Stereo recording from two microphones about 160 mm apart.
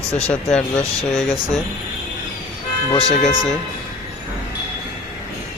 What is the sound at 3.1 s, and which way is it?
Speech, 60° left (ahead or behind).